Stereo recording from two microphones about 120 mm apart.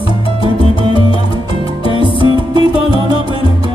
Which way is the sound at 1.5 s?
45° left (ahead or behind).